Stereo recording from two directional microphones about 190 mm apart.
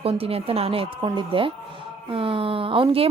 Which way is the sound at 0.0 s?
30° right (ahead or behind).